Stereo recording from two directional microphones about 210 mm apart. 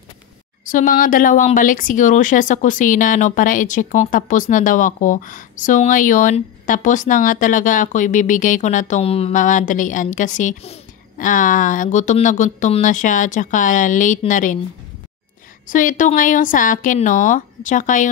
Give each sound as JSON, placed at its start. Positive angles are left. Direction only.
{"t": 0.7, "sound": "a woman's voice", "side_deg": 40}
{"t": 15.6, "sound": "a woman's voice", "side_deg": 40}